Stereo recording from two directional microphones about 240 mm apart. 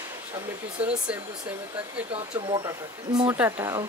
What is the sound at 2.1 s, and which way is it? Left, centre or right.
Speech, right.